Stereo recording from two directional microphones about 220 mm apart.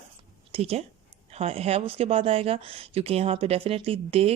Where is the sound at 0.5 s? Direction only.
25° right (ahead or behind).